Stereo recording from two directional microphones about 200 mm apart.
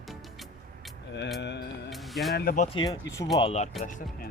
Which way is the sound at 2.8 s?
15° left (ahead or behind).